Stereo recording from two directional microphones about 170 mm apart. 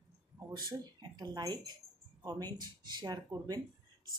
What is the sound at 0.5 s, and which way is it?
Speech, 25° right (ahead or behind).